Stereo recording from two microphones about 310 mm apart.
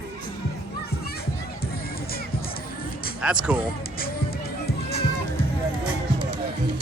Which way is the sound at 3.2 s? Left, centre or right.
Centre.